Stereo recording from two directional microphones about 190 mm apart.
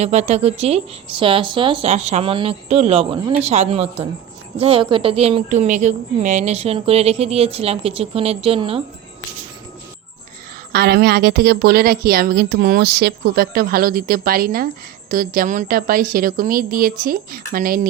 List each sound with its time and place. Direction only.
0.0 s a woman's voice: 35° right (ahead or behind)
10.7 s a woman's voice: 60° right (ahead or behind)